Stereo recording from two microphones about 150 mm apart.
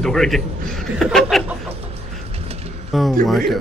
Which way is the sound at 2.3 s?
45° right (ahead or behind).